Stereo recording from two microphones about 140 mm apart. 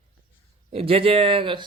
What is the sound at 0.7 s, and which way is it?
Speech, 45° right (ahead or behind).